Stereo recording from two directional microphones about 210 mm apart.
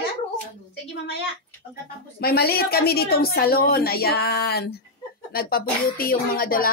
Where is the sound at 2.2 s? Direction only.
50° left (ahead or behind).